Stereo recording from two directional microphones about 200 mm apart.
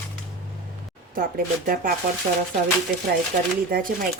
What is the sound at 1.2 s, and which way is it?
Speech, 45° right (ahead or behind).